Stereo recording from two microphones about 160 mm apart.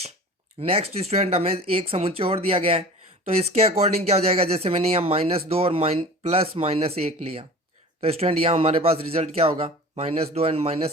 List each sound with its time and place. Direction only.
0.6 s speech: 35° right (ahead or behind)